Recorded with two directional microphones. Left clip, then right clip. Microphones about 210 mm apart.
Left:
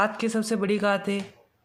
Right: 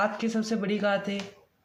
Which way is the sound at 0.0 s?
30° left (ahead or behind).